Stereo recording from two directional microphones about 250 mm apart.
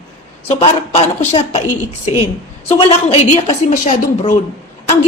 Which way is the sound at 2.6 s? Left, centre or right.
Left.